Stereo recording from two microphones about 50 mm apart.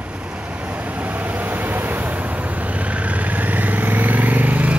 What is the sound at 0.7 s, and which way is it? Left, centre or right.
Vehicle, right.